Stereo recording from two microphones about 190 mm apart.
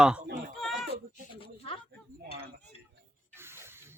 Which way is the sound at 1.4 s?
30° left (ahead or behind).